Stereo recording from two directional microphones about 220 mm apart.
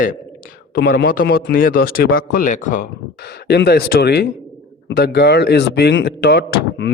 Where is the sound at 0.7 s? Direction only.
45° left (ahead or behind).